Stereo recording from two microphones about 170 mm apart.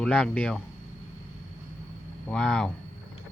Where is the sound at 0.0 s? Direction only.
5° left (ahead or behind).